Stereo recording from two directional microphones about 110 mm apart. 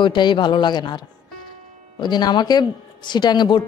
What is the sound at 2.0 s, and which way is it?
A woman's voice, 40° left (ahead or behind).